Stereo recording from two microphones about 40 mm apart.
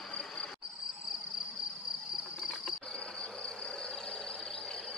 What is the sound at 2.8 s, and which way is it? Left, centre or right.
Insect, left.